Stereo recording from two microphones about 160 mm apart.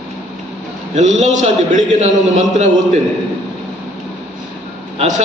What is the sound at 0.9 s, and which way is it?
A man's voice, 45° right (ahead or behind).